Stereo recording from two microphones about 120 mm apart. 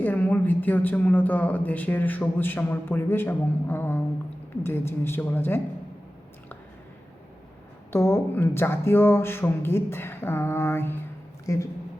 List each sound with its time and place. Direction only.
0.0 s a woman's voice: 15° left (ahead or behind)
7.9 s speech: 20° left (ahead or behind)